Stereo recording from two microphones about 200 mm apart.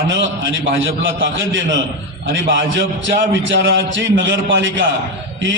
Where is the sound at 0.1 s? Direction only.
65° right (ahead or behind).